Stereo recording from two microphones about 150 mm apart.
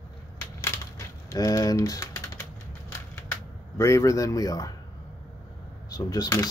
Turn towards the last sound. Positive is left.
turn(degrees=25)  # may be behind; listen again after turning